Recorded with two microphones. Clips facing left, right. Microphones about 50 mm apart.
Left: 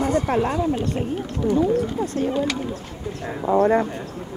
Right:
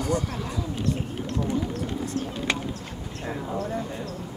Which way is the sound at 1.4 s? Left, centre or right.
Left.